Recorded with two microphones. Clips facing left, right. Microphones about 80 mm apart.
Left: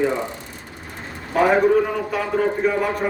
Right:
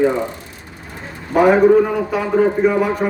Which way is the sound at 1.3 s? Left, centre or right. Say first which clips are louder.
Right 5 dB; centre.